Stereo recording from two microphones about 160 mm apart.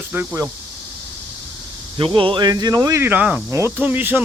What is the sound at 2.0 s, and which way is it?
Speech, 30° right (ahead or behind).